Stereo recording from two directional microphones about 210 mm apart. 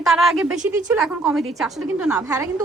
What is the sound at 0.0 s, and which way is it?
A woman's voice, centre (ahead or behind).